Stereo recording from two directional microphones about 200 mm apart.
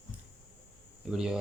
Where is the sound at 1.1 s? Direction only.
5° right (ahead or behind).